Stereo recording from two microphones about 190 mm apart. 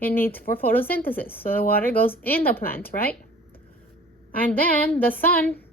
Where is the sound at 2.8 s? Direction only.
50° left (ahead or behind).